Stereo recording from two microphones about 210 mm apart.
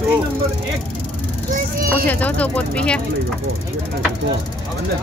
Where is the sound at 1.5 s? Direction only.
45° right (ahead or behind).